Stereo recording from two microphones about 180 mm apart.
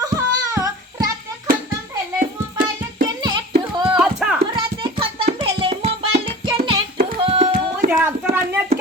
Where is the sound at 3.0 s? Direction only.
25° right (ahead or behind).